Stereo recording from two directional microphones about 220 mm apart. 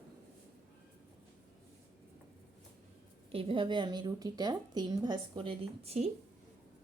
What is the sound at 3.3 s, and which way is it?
A woman's voice, 25° right (ahead or behind).